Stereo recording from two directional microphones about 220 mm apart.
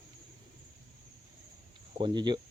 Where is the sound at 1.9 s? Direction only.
20° right (ahead or behind).